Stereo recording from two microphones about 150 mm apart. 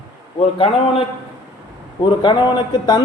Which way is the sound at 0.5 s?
40° left (ahead or behind).